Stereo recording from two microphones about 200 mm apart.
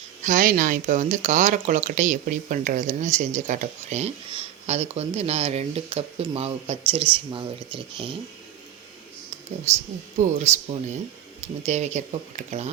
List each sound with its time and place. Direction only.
0.2 s speech: 40° right (ahead or behind)
9.7 s speech: 35° right (ahead or behind)